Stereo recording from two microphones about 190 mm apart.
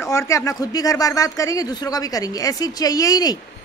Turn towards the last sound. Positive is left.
turn(degrees=20)  # may be behind; listen again after turning